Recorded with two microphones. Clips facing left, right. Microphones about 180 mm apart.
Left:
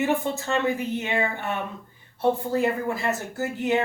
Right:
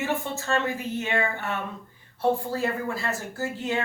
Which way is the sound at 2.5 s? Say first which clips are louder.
Left 4 dB; 20° left (ahead or behind).